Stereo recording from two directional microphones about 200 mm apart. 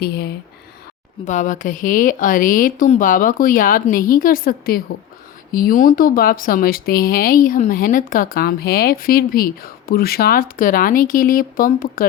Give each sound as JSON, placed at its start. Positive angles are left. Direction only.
{"t": 0.0, "sound": "speech", "side_deg": 55}
{"t": 1.2, "sound": "speech", "side_deg": 40}